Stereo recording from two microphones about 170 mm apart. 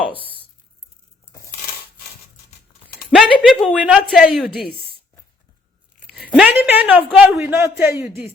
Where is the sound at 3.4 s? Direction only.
5° left (ahead or behind).